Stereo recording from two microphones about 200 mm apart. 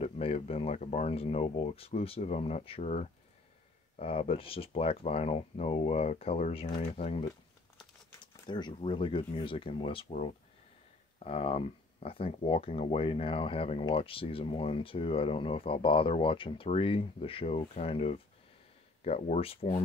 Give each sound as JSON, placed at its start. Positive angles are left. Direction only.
{"t": 0.0, "sound": "speech", "side_deg": 30}
{"t": 8.5, "sound": "speech", "side_deg": 20}